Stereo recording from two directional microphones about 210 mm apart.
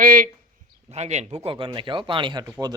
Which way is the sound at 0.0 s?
40° right (ahead or behind).